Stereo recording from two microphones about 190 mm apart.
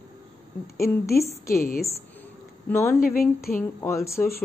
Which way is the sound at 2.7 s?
10° left (ahead or behind).